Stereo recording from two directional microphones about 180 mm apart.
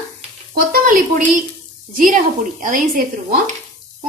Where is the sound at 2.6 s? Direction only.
50° right (ahead or behind).